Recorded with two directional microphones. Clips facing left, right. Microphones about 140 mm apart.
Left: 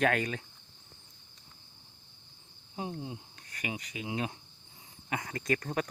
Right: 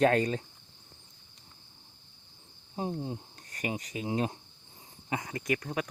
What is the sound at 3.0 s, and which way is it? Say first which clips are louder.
Speech: right 4 dB; 40° right (ahead or behind).